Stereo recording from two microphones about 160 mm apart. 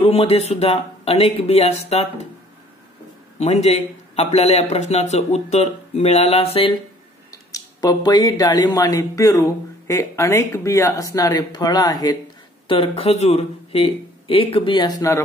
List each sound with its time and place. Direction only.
0.0 s speech: 40° left (ahead or behind)
3.3 s speech: 40° left (ahead or behind)
7.5 s speech: 25° left (ahead or behind)
12.6 s speech: 35° left (ahead or behind)